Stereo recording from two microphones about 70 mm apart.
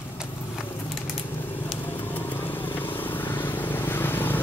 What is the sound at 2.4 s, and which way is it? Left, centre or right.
Vehicle, left.